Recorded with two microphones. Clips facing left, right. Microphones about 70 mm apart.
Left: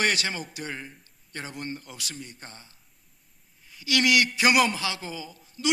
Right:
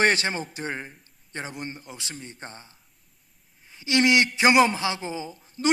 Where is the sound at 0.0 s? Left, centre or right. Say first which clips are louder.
Right 4 dB; right.